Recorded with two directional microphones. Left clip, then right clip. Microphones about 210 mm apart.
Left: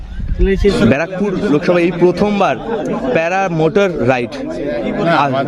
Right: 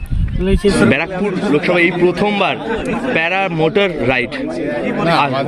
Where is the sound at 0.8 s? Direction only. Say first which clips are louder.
Even; 45° left (ahead or behind).